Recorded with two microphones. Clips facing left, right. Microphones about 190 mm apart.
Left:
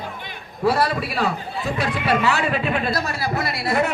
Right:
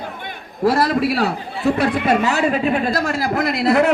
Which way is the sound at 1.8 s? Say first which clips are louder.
Right 2 dB; 55° right (ahead or behind).